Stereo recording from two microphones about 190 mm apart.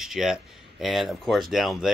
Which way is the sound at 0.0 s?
Centre (ahead or behind).